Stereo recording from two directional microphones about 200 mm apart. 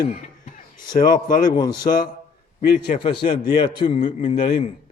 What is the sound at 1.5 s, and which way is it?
Speech, 20° left (ahead or behind).